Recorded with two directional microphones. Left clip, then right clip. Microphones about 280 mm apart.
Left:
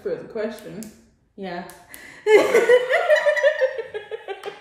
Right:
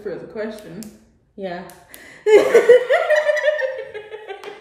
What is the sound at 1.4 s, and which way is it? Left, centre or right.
Speech, centre.